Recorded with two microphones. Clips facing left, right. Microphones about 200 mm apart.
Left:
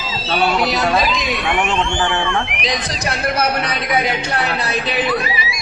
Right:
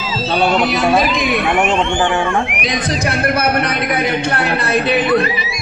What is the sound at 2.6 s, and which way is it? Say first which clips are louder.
A man's voice: right 4 dB; 55° right (ahead or behind).